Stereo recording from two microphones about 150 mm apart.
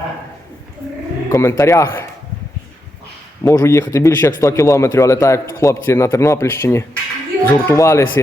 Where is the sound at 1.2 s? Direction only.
20° left (ahead or behind).